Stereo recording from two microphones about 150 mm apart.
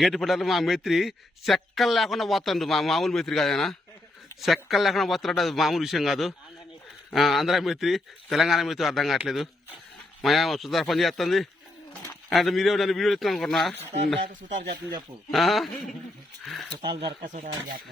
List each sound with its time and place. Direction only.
0.0 s a man's voice: centre (ahead or behind)
15.3 s a man's voice: centre (ahead or behind)
17.2 s speech: 55° right (ahead or behind)